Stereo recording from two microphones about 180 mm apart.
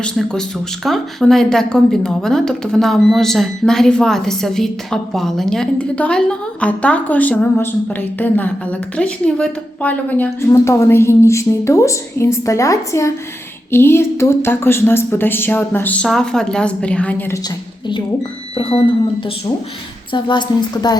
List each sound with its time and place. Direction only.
0.0 s a woman's voice: 5° left (ahead or behind)
17.8 s speech: 25° left (ahead or behind)
20.1 s speech: 25° left (ahead or behind)